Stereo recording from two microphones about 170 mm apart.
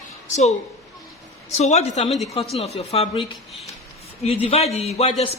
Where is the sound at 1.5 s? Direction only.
40° left (ahead or behind).